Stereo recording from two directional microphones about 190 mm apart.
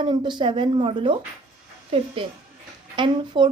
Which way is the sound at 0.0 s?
25° right (ahead or behind).